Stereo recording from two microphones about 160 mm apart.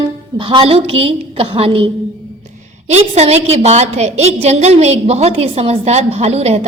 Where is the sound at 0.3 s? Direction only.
30° right (ahead or behind).